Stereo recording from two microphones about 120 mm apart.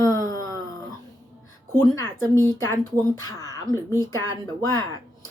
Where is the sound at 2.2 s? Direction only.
25° left (ahead or behind).